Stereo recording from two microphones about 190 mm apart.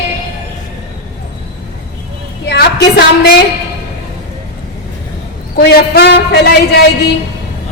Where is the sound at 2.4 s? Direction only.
60° left (ahead or behind).